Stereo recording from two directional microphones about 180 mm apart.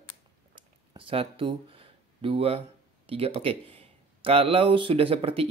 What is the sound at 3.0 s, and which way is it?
Speech, 35° right (ahead or behind).